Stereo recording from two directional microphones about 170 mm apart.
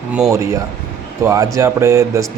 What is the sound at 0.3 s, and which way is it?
Speech, 20° right (ahead or behind).